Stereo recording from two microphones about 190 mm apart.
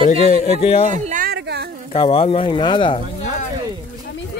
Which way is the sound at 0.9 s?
40° right (ahead or behind).